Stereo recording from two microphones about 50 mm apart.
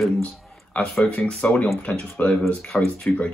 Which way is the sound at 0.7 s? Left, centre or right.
Left.